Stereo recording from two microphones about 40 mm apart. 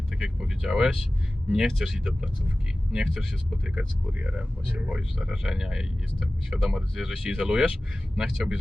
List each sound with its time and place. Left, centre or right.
0.1 s speech: centre
3.8 s speech: right
5.3 s speech: centre